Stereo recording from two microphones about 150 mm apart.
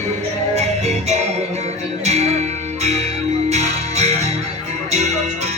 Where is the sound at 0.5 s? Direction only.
45° right (ahead or behind).